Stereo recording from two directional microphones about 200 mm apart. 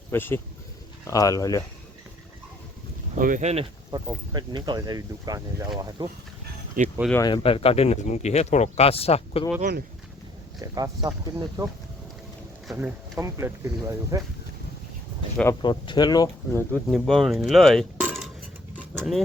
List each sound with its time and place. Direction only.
0.1 s speech: 10° left (ahead or behind)
3.2 s speech: 40° right (ahead or behind)
3.9 s speech: 20° right (ahead or behind)
6.8 s speech: 40° right (ahead or behind)
7.1 s speech: 20° left (ahead or behind)
9.6 s speech: 45° right (ahead or behind)
10.6 s speech: 20° right (ahead or behind)
15.6 s speech: 25° left (ahead or behind)
16.9 s a sound: centre (ahead or behind)
18.9 s speech: centre (ahead or behind)